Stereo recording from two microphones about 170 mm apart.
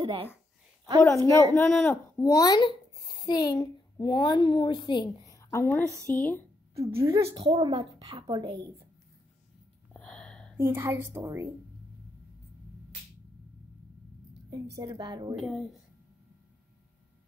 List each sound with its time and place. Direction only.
0.0 s a woman's voice: 30° right (ahead or behind)
1.0 s a woman's voice: 15° left (ahead or behind)
6.7 s a sound: 35° right (ahead or behind)
7.3 s a woman's voice: 30° right (ahead or behind)
9.9 s gasp: 5° left (ahead or behind)
10.6 s a woman's voice: 10° right (ahead or behind)
14.8 s a woman's voice: 25° right (ahead or behind)
15.3 s a woman's voice: centre (ahead or behind)